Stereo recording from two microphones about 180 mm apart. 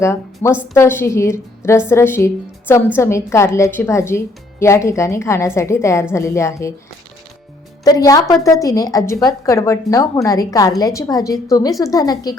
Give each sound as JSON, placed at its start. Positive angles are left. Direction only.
{"t": 0.0, "sound": "a woman's voice", "side_deg": 15}
{"t": 7.9, "sound": "a woman's voice", "side_deg": 20}